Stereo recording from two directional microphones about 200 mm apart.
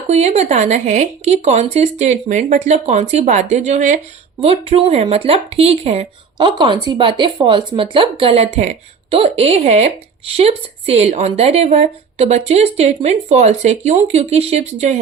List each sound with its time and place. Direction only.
0.1 s speech: 35° right (ahead or behind)